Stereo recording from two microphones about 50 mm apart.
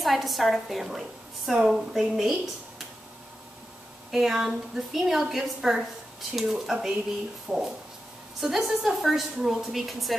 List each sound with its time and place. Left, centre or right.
0.0 s a woman's voice: centre
4.1 s a woman's voice: centre
8.4 s a woman's voice: centre